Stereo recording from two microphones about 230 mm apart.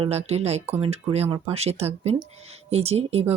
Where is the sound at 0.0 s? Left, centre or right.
Right.